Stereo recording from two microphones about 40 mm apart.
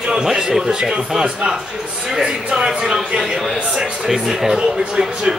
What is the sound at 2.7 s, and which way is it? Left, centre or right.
A man's voice, centre.